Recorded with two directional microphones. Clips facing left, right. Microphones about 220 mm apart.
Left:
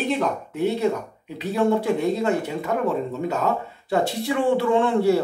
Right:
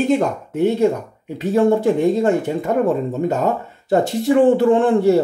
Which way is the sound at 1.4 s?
45° right (ahead or behind).